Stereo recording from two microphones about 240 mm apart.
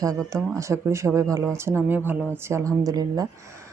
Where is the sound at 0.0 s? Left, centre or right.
Centre.